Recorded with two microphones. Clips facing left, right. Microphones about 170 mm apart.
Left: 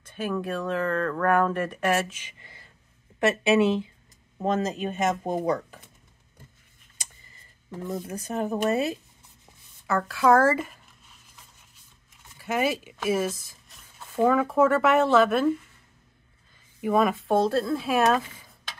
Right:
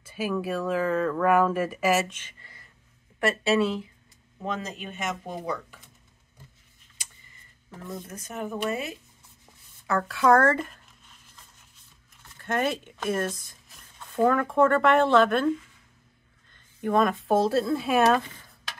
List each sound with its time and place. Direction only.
0.0 s speech: 5° right (ahead or behind)
2.1 s a woman's voice: 10° left (ahead or behind)
4.4 s speech: 45° left (ahead or behind)
8.2 s speech: 35° left (ahead or behind)
9.8 s writing: centre (ahead or behind)
12.2 s speech: 5° left (ahead or behind)